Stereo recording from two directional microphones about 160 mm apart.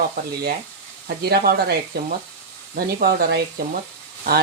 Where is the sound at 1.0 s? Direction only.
80° right.